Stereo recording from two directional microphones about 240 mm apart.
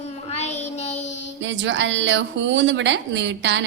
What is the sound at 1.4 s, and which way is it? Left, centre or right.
Speech, right.